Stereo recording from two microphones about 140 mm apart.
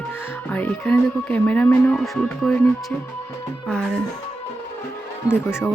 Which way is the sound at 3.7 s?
5° left (ahead or behind).